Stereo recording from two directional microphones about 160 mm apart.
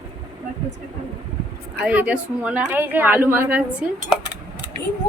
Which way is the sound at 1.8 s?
10° right (ahead or behind).